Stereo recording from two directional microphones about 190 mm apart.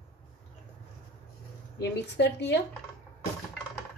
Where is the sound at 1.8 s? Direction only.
65° left (ahead or behind).